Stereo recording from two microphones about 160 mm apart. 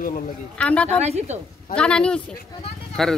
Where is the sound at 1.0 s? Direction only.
45° right (ahead or behind).